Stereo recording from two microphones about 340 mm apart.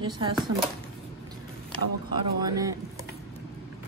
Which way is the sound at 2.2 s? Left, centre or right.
Centre.